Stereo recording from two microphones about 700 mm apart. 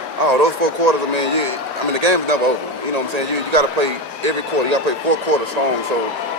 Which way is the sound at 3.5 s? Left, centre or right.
Right.